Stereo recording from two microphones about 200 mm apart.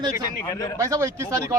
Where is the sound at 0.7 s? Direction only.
15° right (ahead or behind).